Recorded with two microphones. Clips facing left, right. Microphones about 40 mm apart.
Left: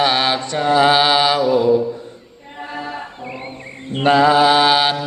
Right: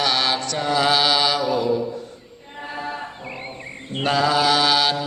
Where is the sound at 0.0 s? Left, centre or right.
Left.